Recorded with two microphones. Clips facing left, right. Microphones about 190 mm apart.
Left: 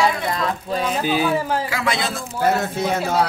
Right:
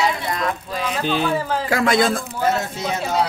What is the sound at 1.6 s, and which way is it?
Speech, 50° right (ahead or behind).